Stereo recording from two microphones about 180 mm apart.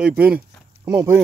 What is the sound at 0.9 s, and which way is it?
Speech, 20° right (ahead or behind).